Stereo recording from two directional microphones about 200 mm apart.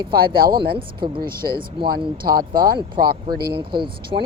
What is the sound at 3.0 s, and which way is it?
Speech, 45° right (ahead or behind).